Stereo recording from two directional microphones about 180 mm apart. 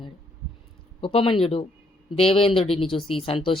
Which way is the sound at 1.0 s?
30° left (ahead or behind).